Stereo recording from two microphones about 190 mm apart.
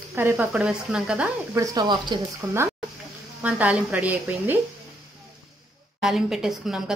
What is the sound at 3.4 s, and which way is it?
A woman's voice, 5° right (ahead or behind).